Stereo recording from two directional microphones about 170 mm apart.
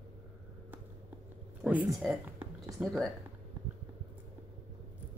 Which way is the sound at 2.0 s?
5° right (ahead or behind).